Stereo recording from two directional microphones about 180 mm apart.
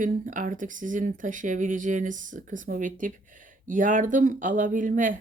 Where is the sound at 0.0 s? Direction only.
45° right (ahead or behind).